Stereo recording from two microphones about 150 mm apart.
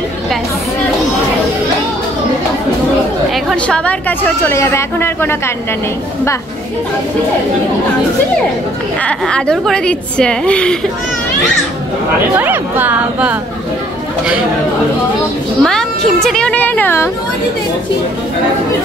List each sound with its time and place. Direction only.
3.4 s a woman's voice: 5° left (ahead or behind)
4.4 s a woman's voice: 15° left (ahead or behind)
9.0 s a woman's voice: 5° left (ahead or behind)
12.4 s a woman's voice: 10° right (ahead or behind)
15.6 s a woman's voice: 5° left (ahead or behind)